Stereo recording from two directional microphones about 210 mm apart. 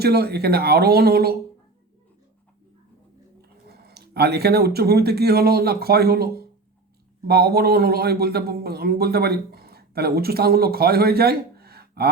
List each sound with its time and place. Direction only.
0.0 s a man's voice: 50° right (ahead or behind)
3.7 s a man's voice: 50° right (ahead or behind)